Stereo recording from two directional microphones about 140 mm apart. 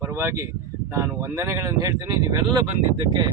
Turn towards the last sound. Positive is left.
turn(degrees=-30)  # may be behind; listen again after turning